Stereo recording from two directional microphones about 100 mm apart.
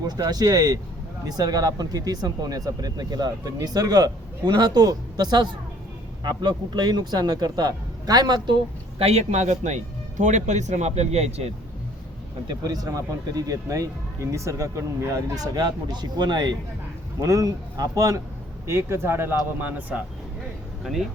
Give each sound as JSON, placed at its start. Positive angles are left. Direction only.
{"t": 0.0, "sound": "speech", "side_deg": -40}
{"t": 9.0, "sound": "a man's voice", "side_deg": -85}
{"t": 10.8, "sound": "speech", "side_deg": -90}
{"t": 12.5, "sound": "speech", "side_deg": -40}
{"t": 18.6, "sound": "speech", "side_deg": -25}
{"t": 20.8, "sound": "speech", "side_deg": 0}